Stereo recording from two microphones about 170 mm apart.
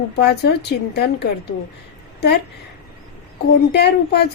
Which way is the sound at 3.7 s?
75° left (ahead or behind).